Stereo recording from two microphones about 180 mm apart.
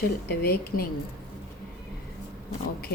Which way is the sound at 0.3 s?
60° left (ahead or behind).